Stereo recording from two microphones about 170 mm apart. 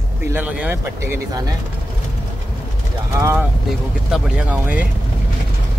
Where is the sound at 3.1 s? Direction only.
15° right (ahead or behind).